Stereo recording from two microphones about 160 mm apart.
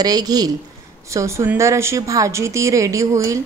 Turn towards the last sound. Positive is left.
turn(degrees=-20)  # may be behind; listen again after turning